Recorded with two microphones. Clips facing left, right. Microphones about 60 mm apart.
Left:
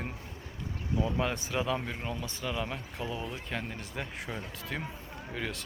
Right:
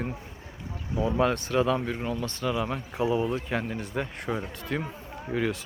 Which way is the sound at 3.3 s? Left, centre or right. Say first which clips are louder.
Right 8 dB; centre.